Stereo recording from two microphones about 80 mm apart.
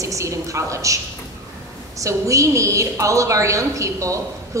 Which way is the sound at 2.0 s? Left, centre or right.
Right.